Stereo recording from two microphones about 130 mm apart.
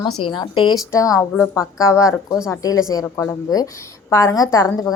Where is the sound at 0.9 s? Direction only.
25° left (ahead or behind).